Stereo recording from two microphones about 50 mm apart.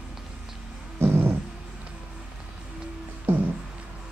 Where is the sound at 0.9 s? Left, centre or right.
Right.